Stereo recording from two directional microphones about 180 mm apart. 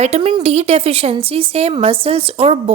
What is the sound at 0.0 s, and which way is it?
A woman's voice, 35° right (ahead or behind).